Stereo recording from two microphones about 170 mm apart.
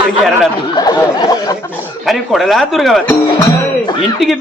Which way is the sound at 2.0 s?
Centre (ahead or behind).